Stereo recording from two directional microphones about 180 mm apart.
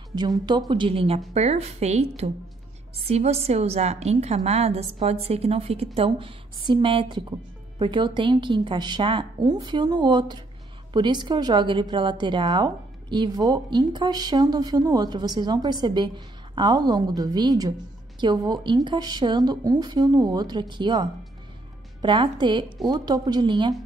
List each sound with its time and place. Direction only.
0.1 s a woman's voice: 25° right (ahead or behind)